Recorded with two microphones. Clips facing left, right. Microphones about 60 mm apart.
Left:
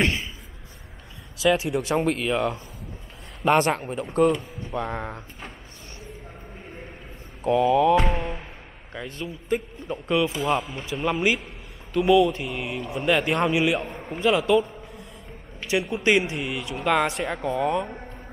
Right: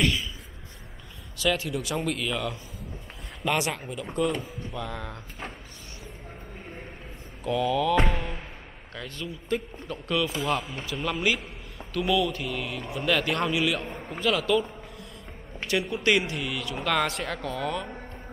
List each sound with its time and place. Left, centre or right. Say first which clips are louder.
0.0 s speech: left 2 dB; left
1.4 s speech: left 5 dB; left
4.4 s speech: right 1 dB; centre
4.7 s speech: left 7 dB; left
7.4 s speech: left 6 dB; left
8.1 s music: left 4 dB; centre
8.9 s speech: left 3 dB; left
10.6 s speech: left 2 dB; centre
10.9 s speech: left 4 dB; left
13.8 s a man's voice: left 2 dB; centre
14.2 s speech: left 4 dB; left
15.9 s speech: left 4 dB; left